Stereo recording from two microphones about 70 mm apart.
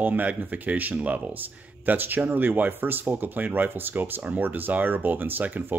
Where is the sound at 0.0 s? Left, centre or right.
Right.